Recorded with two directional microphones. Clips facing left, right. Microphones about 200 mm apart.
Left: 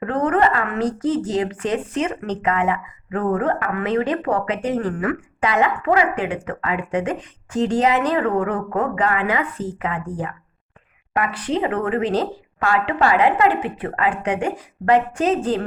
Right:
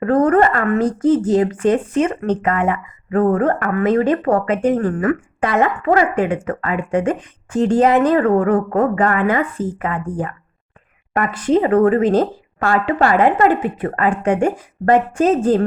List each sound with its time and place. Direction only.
0.0 s speech: 40° right (ahead or behind)